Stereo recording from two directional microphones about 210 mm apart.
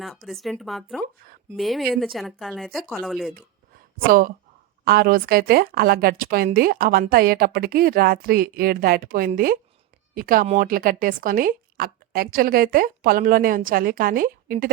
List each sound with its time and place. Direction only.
0.3 s speech: centre (ahead or behind)
1.0 s speech: 45° right (ahead or behind)
1.5 s speech: centre (ahead or behind)
4.0 s a woman's voice: 45° right (ahead or behind)